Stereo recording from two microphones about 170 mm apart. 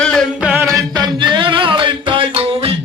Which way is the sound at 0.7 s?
25° right (ahead or behind).